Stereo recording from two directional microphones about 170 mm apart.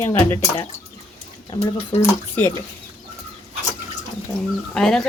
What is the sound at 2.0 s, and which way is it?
Speech, 10° left (ahead or behind).